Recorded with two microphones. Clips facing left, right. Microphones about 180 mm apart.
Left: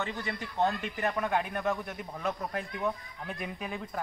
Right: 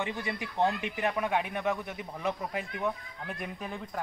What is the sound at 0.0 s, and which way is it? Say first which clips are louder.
A man's voice: right 1 dB; 15° right (ahead or behind).